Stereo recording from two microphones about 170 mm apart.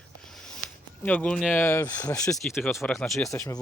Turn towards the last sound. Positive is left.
turn(degrees=20)  # may be behind; listen again after turning